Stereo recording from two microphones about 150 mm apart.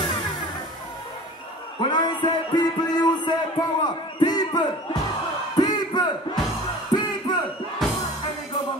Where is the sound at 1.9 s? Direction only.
30° left (ahead or behind).